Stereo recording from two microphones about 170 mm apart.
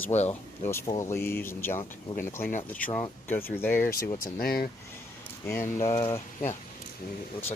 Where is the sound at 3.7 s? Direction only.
55° left (ahead or behind).